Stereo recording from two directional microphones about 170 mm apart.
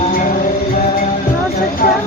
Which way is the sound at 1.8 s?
55° left (ahead or behind).